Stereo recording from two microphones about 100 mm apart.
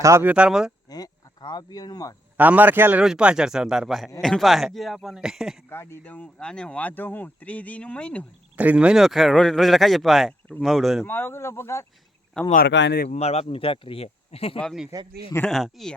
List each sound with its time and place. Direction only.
0.0 s speech: 30° right (ahead or behind)
0.3 s a man's voice: 10° right (ahead or behind)
0.9 s speech: 40° left (ahead or behind)
2.4 s a man's voice: 15° right (ahead or behind)
3.0 s a man's voice: 10° right (ahead or behind)
5.6 s speech: 25° left (ahead or behind)
8.5 s speech: 10° right (ahead or behind)
11.0 s speech: 20° left (ahead or behind)
12.4 s speech: 10° left (ahead or behind)
13.1 s speech: 90° left
14.9 s a man's voice: 30° right (ahead or behind)
15.4 s speech: 5° left (ahead or behind)